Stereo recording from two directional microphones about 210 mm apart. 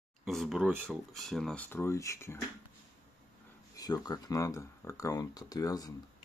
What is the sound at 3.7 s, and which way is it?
Speech, 20° left (ahead or behind).